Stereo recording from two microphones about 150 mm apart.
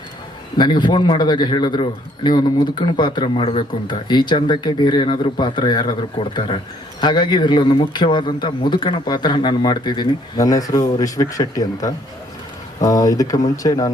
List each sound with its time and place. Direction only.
0.5 s speech: 30° left (ahead or behind)